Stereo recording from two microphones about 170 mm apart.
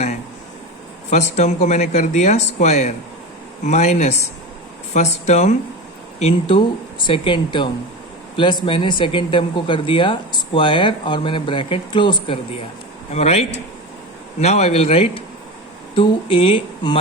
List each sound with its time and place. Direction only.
1.1 s speech: 45° left (ahead or behind)
13.1 s speech: 40° left (ahead or behind)